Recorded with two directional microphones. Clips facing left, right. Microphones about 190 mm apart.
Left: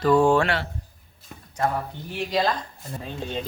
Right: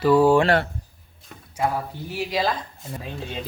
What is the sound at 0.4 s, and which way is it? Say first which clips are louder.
Speech: right 6 dB; 50° right (ahead or behind).